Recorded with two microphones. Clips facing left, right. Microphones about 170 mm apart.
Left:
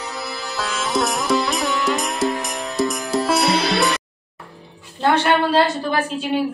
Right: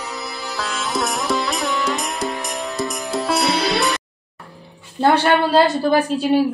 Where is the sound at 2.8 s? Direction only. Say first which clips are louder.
Left 5 dB; centre (ahead or behind).